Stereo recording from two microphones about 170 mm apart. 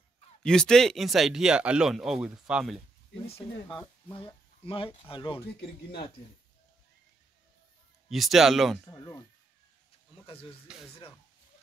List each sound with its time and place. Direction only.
0.4 s speech: 5° left (ahead or behind)
3.6 s speech: 25° left (ahead or behind)
8.1 s speech: centre (ahead or behind)
8.9 s speech: 20° left (ahead or behind)
10.7 s speech: 5° right (ahead or behind)